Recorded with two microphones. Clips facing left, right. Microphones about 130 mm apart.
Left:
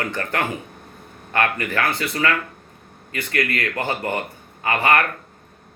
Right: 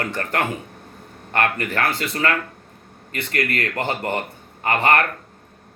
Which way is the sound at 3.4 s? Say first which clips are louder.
Even; 25° right (ahead or behind).